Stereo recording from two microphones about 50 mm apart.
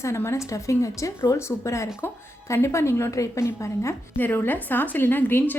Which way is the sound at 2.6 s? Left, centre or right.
Left.